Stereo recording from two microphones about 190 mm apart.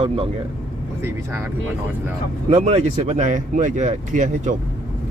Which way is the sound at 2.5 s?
35° right (ahead or behind).